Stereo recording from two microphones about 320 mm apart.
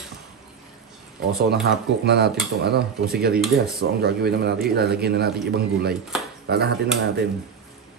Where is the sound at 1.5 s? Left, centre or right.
Right.